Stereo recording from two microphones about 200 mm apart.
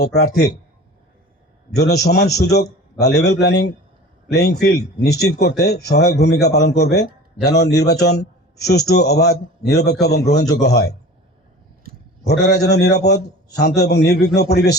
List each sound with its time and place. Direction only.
0.0 s a man's voice: 55° left (ahead or behind)
1.7 s a man's voice: 55° left (ahead or behind)
12.2 s a man's voice: 55° left (ahead or behind)